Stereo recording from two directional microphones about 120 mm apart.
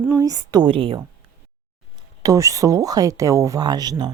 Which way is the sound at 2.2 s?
25° right (ahead or behind).